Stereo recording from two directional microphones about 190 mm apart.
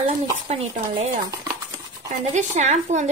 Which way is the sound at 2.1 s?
40° right (ahead or behind).